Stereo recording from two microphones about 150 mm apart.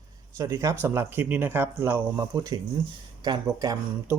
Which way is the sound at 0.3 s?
20° right (ahead or behind).